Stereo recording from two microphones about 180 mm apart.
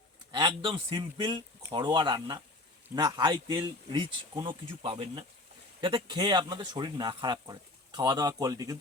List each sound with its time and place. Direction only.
0.3 s speech: 25° right (ahead or behind)